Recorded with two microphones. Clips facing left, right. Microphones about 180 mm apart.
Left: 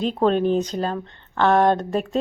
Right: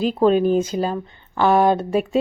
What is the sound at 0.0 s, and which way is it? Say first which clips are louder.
Speech: right 3 dB; 5° right (ahead or behind).